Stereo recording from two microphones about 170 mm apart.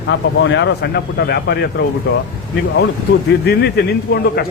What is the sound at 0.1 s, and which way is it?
Speech, 90° left.